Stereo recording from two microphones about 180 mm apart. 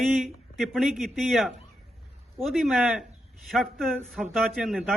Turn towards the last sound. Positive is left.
turn(degrees=0)  # may be behind; listen again after turning